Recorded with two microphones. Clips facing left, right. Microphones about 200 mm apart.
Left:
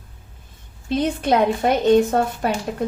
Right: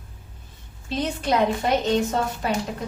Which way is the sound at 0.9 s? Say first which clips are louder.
Left 5 dB; 55° left (ahead or behind).